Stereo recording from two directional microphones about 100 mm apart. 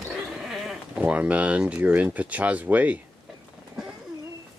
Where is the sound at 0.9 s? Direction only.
15° right (ahead or behind).